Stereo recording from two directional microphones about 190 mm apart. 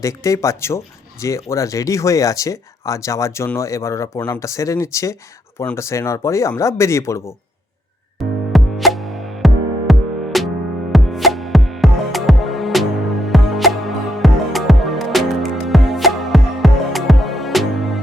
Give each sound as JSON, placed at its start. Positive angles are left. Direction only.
{"t": 0.0, "sound": "speech", "side_deg": 15}
{"t": 8.2, "sound": "music", "side_deg": 0}